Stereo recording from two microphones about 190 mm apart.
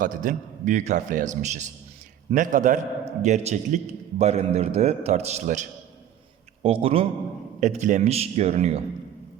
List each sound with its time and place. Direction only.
0.0 s a man's voice: 45° right (ahead or behind)
7.6 s a man's voice: 40° right (ahead or behind)